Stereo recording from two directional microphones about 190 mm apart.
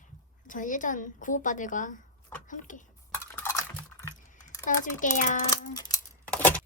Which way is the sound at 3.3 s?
15° left (ahead or behind).